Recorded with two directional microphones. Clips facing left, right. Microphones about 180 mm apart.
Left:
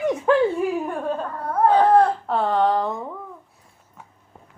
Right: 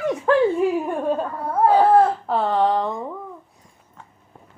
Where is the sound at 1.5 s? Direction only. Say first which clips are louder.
Right 1 dB; 5° right (ahead or behind).